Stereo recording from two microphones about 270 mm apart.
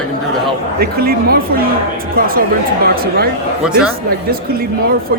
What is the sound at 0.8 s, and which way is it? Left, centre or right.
Speech, right.